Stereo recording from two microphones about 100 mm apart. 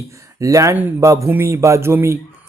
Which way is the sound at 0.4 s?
35° right (ahead or behind).